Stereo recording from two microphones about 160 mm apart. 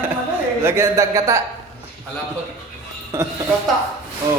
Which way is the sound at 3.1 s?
15° right (ahead or behind).